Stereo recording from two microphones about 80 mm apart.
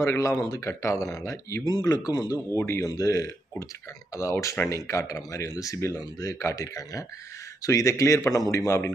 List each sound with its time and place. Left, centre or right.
0.0 s speech: left
1.6 s speech: left
2.5 s speech: left
2.8 s speech: left